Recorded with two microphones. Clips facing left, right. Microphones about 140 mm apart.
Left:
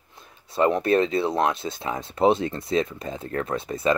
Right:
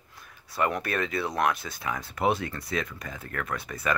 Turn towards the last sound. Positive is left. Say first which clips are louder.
# left 7 dB
turn(degrees=25)  # may be behind; listen again after turning